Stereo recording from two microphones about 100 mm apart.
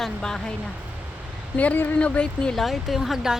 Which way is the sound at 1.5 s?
15° left (ahead or behind).